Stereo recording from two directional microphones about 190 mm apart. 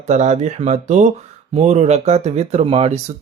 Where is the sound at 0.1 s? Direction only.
40° right (ahead or behind).